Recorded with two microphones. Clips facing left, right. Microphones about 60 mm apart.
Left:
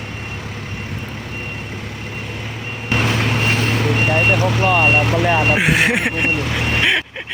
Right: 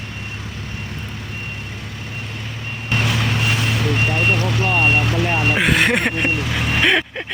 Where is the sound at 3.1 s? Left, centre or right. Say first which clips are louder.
Left 2 dB; left.